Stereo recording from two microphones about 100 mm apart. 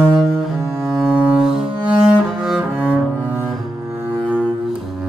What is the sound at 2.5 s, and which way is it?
Cello, 10° right (ahead or behind).